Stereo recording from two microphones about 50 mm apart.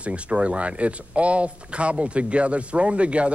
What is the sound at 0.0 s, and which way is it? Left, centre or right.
Speech, right.